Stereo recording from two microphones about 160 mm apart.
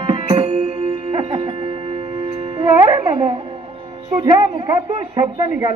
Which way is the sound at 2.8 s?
30° right (ahead or behind).